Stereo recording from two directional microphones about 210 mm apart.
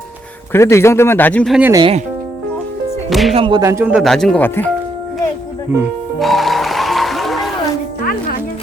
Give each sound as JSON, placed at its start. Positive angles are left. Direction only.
{"t": 0.5, "sound": "a man's voice", "side_deg": 15}
{"t": 1.5, "sound": "speech", "side_deg": -10}
{"t": 1.8, "sound": "speech", "side_deg": -30}
{"t": 3.1, "sound": "speech", "side_deg": 0}
{"t": 3.3, "sound": "speech", "side_deg": -25}
{"t": 3.6, "sound": "speech", "side_deg": -15}
{"t": 6.1, "sound": "music", "side_deg": 0}